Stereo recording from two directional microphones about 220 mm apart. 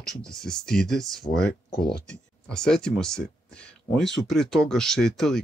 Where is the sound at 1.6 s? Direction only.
50° left (ahead or behind).